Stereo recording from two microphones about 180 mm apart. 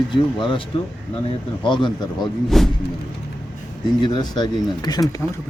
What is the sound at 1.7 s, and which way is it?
Speech, 25° left (ahead or behind).